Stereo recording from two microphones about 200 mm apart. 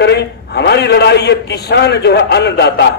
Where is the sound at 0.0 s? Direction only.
55° left (ahead or behind).